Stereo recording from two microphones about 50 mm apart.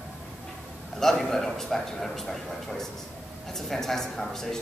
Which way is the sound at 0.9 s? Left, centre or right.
Centre.